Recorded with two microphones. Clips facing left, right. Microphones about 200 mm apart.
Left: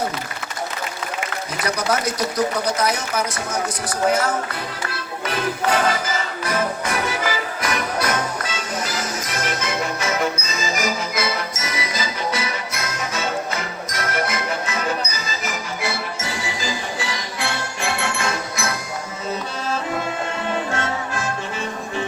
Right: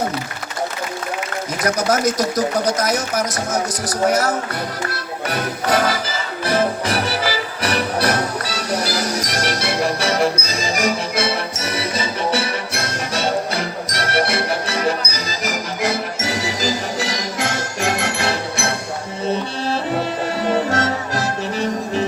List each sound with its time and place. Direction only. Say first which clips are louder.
1.6 s speech: right 5 dB; 45° right (ahead or behind)
5.4 s music: right 1 dB; 35° right (ahead or behind)
13.1 s music: right 6 dB; 35° right (ahead or behind)